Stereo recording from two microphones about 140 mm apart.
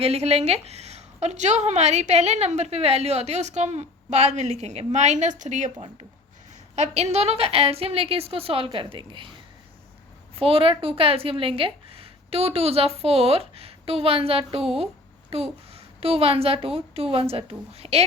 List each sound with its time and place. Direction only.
0.0 s a woman's voice: 45° right (ahead or behind)
6.7 s a woman's voice: 55° right (ahead or behind); by 9.3 s 35° right (ahead or behind)
10.3 s a woman's voice: 40° right (ahead or behind)